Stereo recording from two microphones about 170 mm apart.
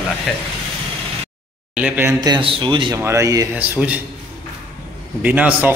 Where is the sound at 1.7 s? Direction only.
10° right (ahead or behind).